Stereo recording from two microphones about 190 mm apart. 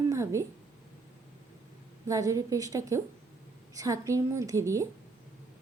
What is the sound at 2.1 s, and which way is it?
A woman's voice, 15° right (ahead or behind).